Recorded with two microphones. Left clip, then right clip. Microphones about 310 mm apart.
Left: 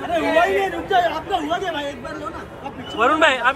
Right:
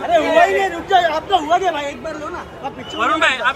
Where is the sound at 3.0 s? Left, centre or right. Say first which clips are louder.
Even; centre.